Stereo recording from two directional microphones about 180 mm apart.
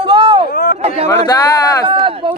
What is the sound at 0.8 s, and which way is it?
Speech, 35° right (ahead or behind).